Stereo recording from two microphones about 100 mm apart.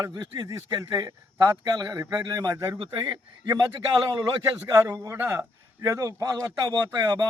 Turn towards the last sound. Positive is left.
turn(degrees=-40)  # may be behind; listen again after turning